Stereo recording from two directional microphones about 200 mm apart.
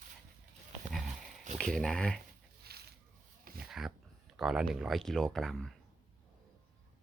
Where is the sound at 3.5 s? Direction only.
Centre (ahead or behind).